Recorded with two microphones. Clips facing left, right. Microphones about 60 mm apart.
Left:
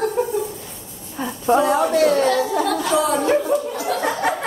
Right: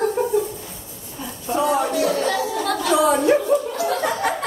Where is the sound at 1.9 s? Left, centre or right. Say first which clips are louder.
Left 4 dB; left.